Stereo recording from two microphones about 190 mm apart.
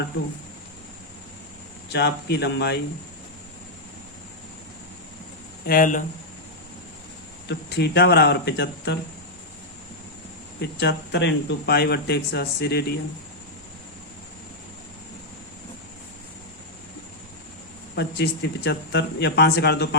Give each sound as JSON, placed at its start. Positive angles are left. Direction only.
{"t": 1.9, "sound": "speech", "side_deg": 60}
{"t": 5.6, "sound": "speech", "side_deg": 45}
{"t": 7.4, "sound": "speech", "side_deg": 60}
{"t": 10.6, "sound": "speech", "side_deg": 60}
{"t": 17.9, "sound": "speech", "side_deg": 60}